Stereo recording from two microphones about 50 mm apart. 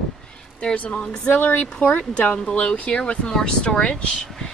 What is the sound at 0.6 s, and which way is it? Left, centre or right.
Speech, left.